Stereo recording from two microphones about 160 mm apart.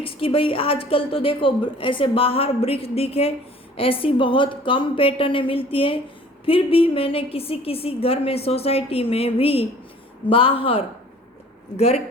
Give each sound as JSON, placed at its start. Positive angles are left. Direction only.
{"t": 0.0, "sound": "a woman's voice", "side_deg": 35}